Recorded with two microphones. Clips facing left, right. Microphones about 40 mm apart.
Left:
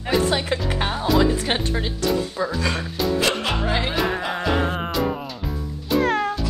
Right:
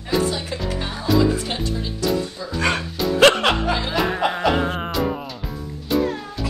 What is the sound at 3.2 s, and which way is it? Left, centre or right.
Music, right.